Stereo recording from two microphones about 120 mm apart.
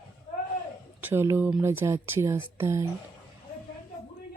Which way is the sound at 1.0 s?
20° right (ahead or behind).